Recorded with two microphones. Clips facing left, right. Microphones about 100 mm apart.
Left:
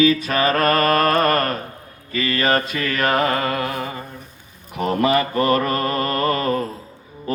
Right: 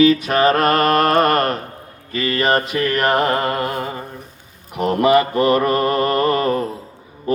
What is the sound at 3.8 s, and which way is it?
Mantra, 35° right (ahead or behind).